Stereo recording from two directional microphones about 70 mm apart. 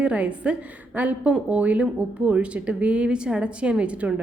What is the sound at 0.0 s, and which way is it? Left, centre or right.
A woman's voice, centre.